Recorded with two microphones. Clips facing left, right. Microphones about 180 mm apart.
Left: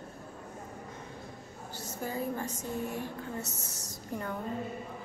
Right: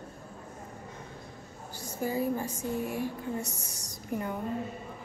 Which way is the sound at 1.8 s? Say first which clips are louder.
Right 5 dB; 10° right (ahead or behind).